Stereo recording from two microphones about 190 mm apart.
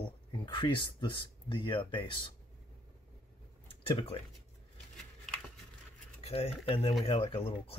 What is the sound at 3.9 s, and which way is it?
Speech, 30° left (ahead or behind).